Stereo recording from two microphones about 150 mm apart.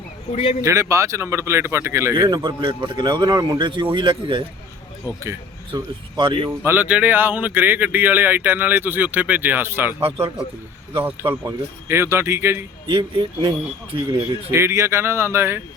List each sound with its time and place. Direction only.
0.6 s speech: 20° right (ahead or behind)
2.4 s speech: 35° right (ahead or behind)
5.2 s speech: 20° right (ahead or behind)
6.1 s speech: 35° right (ahead or behind)
6.6 s speech: 10° right (ahead or behind)
10.0 s speech: 35° right (ahead or behind)
10.9 s speech: 15° right (ahead or behind)
12.9 s speech: 35° right (ahead or behind)
14.5 s speech: 15° right (ahead or behind)